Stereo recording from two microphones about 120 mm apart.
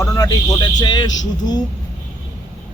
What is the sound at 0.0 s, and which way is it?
Speech, 25° left (ahead or behind).